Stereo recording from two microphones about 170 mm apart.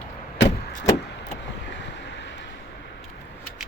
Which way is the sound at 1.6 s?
90° left.